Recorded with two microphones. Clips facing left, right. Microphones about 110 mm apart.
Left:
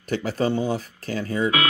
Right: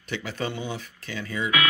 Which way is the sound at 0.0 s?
40° left (ahead or behind).